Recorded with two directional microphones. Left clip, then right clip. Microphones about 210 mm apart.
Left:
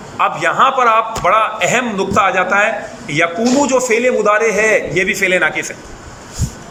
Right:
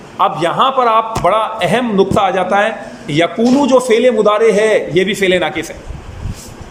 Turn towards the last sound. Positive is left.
turn(degrees=-20)  # may be behind; listen again after turning